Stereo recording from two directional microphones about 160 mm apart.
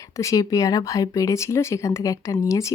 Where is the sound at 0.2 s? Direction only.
20° left (ahead or behind).